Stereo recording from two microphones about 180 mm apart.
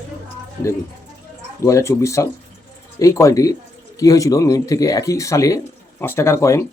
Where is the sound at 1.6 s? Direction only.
15° left (ahead or behind).